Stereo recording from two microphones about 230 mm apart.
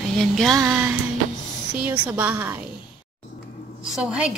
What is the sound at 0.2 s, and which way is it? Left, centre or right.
Speech, centre.